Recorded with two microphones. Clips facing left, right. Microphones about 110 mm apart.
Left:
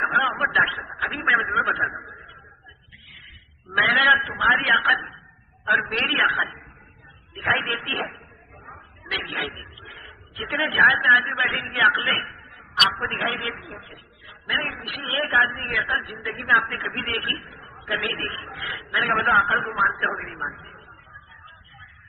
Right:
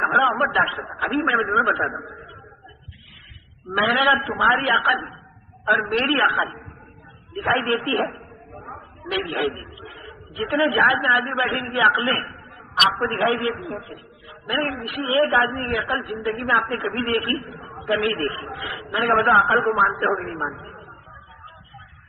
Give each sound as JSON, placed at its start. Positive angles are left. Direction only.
{"t": 0.0, "sound": "a sound", "side_deg": -30}
{"t": 0.5, "sound": "a man's voice", "side_deg": -30}
{"t": 3.7, "sound": "a man's voice", "side_deg": -30}
{"t": 7.3, "sound": "a sound", "side_deg": -30}
{"t": 11.0, "sound": "a man's voice", "side_deg": -40}
{"t": 17.8, "sound": "a man's voice", "side_deg": -40}